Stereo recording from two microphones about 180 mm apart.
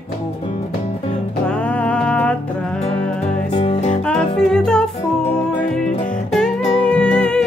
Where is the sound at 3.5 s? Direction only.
30° left (ahead or behind).